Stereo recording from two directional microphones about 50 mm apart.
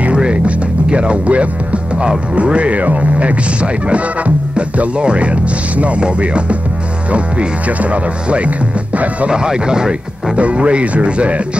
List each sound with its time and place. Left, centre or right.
0.0 s music: right
2.3 s speech: right
9.3 s speech: centre